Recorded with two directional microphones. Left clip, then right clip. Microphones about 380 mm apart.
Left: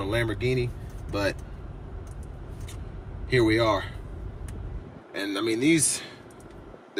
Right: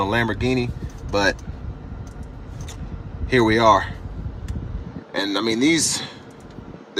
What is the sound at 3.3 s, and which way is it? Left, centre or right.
Speech, centre.